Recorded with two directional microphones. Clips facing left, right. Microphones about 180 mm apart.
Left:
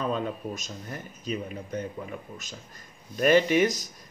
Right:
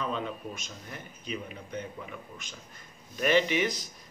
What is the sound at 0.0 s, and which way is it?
Speech, 40° left (ahead or behind).